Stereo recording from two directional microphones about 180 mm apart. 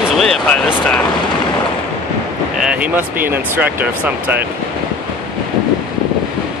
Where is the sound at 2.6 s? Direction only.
5° right (ahead or behind).